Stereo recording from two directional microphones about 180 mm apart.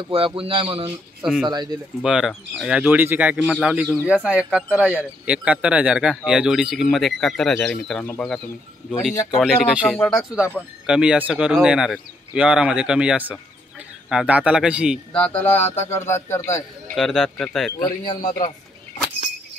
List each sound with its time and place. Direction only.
0.1 s speech: 30° right (ahead or behind)
2.0 s speech: 5° right (ahead or behind)
9.3 s speech: centre (ahead or behind)
15.1 s a man's voice: 10° left (ahead or behind)
16.9 s speech: centre (ahead or behind)
17.7 s a man's voice: 20° left (ahead or behind)